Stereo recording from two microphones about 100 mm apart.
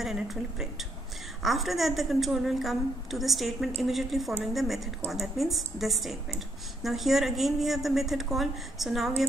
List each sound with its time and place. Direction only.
0.0 s a woman's voice: 5° right (ahead or behind)